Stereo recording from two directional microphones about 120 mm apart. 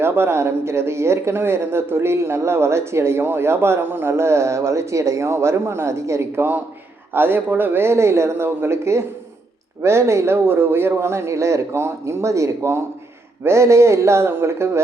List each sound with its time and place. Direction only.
0.0 s speech: 20° right (ahead or behind)